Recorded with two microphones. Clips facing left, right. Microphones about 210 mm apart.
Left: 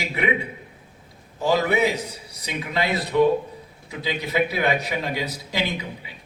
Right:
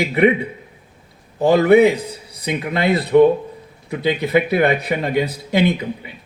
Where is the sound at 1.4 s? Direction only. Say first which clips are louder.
Right 9 dB; 55° right (ahead or behind).